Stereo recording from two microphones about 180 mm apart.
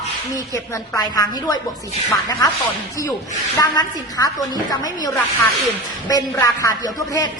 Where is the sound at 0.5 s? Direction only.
20° left (ahead or behind).